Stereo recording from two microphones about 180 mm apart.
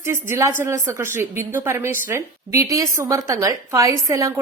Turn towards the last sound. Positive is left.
turn(degrees=-20)  # may be behind; listen again after turning